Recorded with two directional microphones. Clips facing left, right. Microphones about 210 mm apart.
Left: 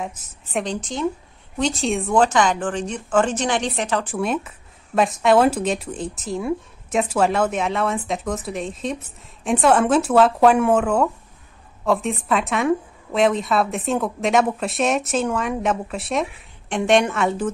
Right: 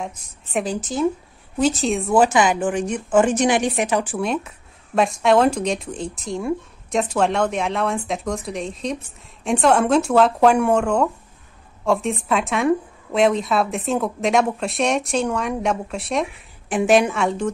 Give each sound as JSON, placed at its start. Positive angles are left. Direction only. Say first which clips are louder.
{"t": 0.0, "sound": "a woman's voice", "louder": "even", "side_deg": 0}